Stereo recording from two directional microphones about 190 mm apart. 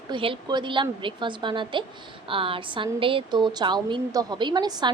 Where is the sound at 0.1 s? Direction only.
25° right (ahead or behind).